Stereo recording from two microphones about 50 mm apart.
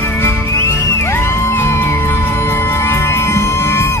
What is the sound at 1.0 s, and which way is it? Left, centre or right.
Music, left.